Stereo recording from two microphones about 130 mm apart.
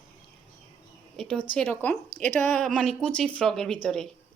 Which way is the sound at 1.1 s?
5° left (ahead or behind).